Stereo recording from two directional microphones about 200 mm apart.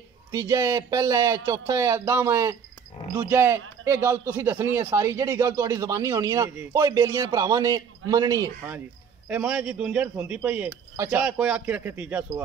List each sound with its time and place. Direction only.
0.3 s speech: 15° right (ahead or behind)
9.3 s speech: 5° right (ahead or behind)